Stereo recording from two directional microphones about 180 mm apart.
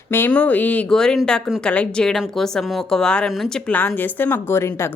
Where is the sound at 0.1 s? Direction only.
10° left (ahead or behind).